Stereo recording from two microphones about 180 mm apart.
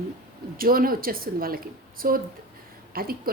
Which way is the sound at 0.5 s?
55° right (ahead or behind).